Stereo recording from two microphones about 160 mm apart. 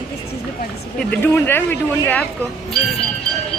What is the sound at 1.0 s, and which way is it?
A man's voice, 10° left (ahead or behind).